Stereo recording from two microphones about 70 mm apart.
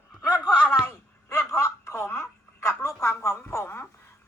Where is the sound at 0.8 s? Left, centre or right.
Left.